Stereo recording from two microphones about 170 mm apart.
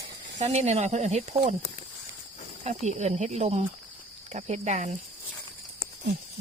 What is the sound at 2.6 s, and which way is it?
Speech, 40° right (ahead or behind).